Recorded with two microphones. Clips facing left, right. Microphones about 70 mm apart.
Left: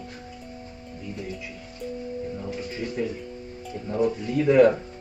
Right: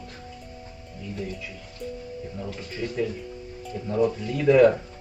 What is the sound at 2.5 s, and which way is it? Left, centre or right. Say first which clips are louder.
Speech: left 1 dB; centre.